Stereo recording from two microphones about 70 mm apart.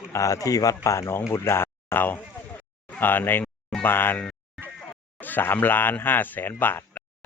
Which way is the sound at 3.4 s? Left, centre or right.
Centre.